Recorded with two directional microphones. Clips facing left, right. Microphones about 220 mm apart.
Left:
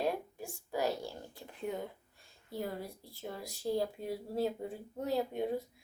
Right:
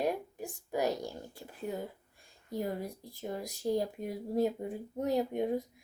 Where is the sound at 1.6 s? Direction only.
5° right (ahead or behind).